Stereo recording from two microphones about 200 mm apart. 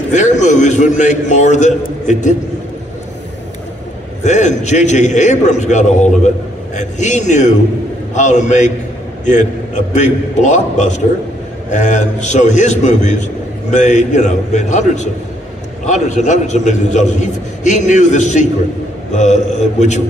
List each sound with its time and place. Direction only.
0.1 s a man's voice: 35° left (ahead or behind)
4.2 s a man's voice: 35° left (ahead or behind)